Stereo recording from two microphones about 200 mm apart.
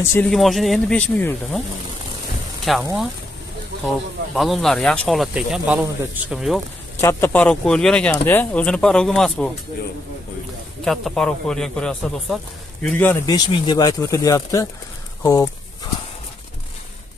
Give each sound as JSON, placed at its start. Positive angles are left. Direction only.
{"t": 0.0, "sound": "speech", "side_deg": 10}
{"t": 2.6, "sound": "speech", "side_deg": 0}
{"t": 4.4, "sound": "speech", "side_deg": 0}
{"t": 7.0, "sound": "speech", "side_deg": 10}
{"t": 10.8, "sound": "speech", "side_deg": 0}